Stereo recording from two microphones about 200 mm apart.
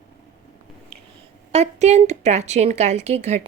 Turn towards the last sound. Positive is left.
turn(degrees=-35)  # may be behind; listen again after turning